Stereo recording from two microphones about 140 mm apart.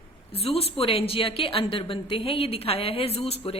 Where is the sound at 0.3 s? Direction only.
45° left (ahead or behind).